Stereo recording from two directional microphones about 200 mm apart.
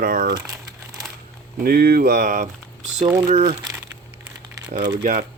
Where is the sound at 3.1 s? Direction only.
15° right (ahead or behind).